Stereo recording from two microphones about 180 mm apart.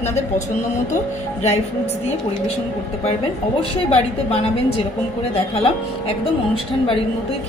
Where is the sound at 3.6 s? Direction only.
35° left (ahead or behind).